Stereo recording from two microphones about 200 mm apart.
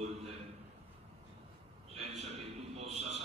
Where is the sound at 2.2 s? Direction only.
30° right (ahead or behind).